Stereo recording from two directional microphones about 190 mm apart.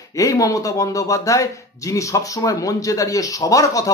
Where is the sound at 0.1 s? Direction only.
15° left (ahead or behind).